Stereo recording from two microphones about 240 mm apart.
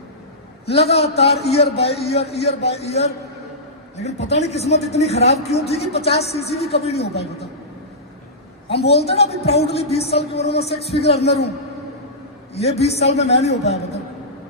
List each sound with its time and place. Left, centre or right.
0.6 s speech: left
4.3 s speech: left
8.7 s speech: left
12.5 s speech: left